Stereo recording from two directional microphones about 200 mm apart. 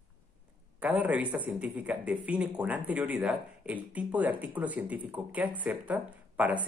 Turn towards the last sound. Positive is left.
turn(degrees=-5)  # may be behind; listen again after turning